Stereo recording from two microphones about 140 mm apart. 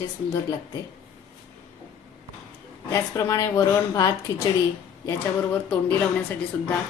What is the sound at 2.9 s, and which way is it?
A woman's voice, 25° left (ahead or behind).